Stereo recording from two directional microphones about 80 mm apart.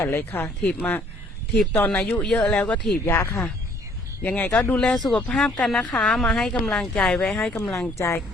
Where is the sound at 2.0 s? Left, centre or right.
Left.